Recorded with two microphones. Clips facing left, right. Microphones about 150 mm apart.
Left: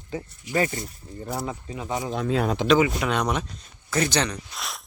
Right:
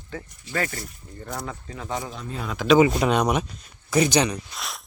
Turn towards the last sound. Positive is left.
turn(degrees=0)  # may be behind; listen again after turning